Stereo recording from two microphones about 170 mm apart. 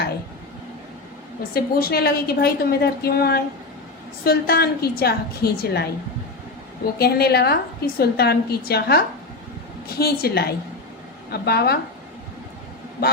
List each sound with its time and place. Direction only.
1.5 s a woman's voice: 65° left (ahead or behind)
7.0 s a woman's voice: 70° left (ahead or behind)
10.0 s a woman's voice: 65° left (ahead or behind)